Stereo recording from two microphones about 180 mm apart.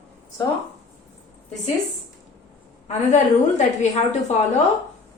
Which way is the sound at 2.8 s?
40° left (ahead or behind).